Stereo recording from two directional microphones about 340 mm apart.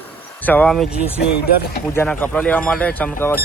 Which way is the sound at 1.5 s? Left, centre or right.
Left.